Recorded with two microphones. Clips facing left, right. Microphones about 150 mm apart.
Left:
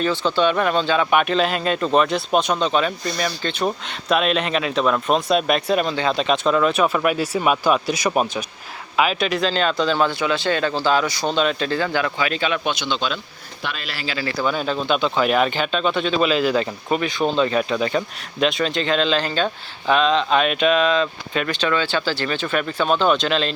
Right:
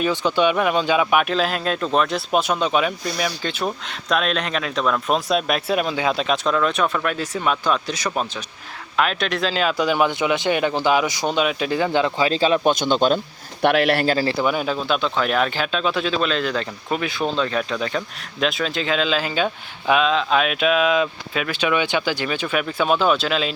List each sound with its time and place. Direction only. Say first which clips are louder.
0.0 s speech: even; 15° right (ahead or behind)
12.1 s speech: right 4 dB; 30° right (ahead or behind)
12.8 s speech: right 6 dB; 45° right (ahead or behind)
13.6 s speech: right 13 dB; 65° right (ahead or behind)
14.2 s speech: right 4 dB; 30° right (ahead or behind)
14.4 s speech: even; 10° right (ahead or behind)